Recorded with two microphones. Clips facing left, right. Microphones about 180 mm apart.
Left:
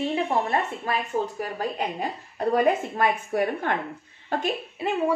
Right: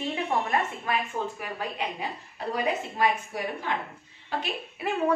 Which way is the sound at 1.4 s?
40° left (ahead or behind).